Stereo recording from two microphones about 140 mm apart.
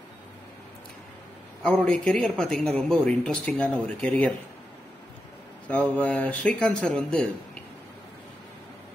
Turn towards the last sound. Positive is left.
turn(degrees=5)  # may be behind; listen again after turning